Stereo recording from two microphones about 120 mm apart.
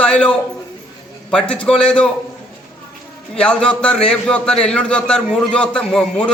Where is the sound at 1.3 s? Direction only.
10° left (ahead or behind).